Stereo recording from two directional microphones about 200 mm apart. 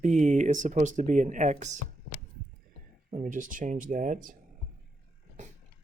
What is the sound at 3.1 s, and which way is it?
Speech, 40° right (ahead or behind).